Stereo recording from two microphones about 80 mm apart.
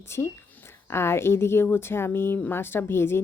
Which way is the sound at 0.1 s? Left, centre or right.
Left.